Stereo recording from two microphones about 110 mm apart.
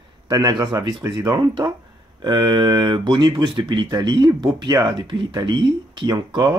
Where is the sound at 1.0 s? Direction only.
30° right (ahead or behind).